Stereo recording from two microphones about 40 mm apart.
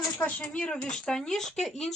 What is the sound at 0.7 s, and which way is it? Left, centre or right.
Speech, centre.